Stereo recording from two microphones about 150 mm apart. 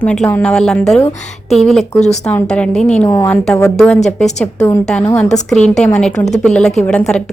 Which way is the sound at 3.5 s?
5° left (ahead or behind).